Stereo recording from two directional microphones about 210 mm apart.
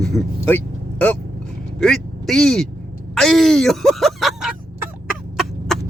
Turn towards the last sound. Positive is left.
turn(degrees=0)  # may be behind; listen again after turning